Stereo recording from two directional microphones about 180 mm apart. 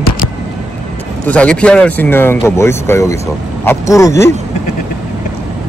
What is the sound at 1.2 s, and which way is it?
Speech, 5° left (ahead or behind).